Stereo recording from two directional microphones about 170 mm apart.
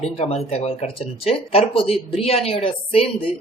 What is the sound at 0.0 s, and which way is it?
Speech, 35° left (ahead or behind).